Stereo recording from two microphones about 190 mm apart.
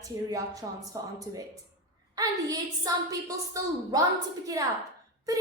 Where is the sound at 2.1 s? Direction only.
20° right (ahead or behind).